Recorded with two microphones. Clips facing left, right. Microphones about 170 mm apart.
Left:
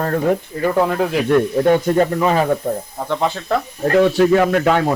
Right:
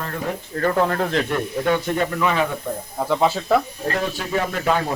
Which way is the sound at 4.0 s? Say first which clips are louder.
Left 13 dB; 90° left.